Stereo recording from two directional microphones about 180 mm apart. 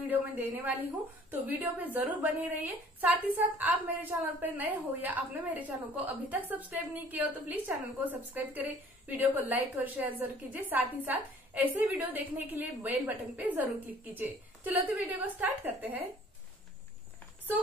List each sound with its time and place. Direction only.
0.0 s a woman's voice: 10° right (ahead or behind)